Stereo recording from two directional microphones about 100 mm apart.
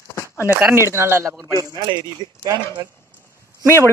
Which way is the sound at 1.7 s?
50° right (ahead or behind).